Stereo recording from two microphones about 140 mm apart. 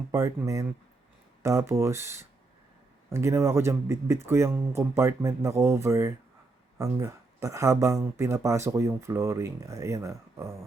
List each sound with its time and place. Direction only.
0.1 s speech: 20° right (ahead or behind)